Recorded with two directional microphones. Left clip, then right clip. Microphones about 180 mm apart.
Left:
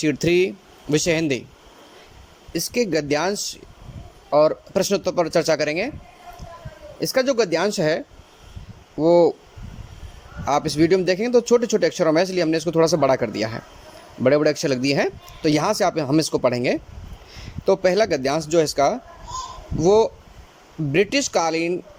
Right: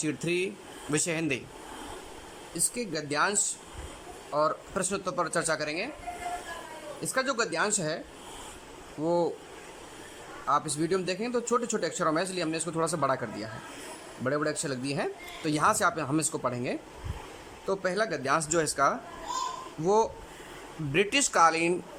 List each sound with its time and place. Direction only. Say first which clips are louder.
0.0 s speech: left 11 dB; 30° left (ahead or behind)
2.5 s speech: left 12 dB; 35° left (ahead or behind)
7.0 s speech: left 10 dB; 30° left (ahead or behind)
10.4 s speech: left 9 dB; 30° left (ahead or behind)